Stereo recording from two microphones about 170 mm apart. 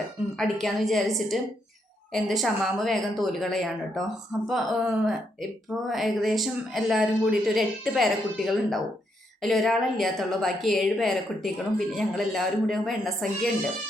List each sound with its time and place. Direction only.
0.3 s a woman's voice: centre (ahead or behind)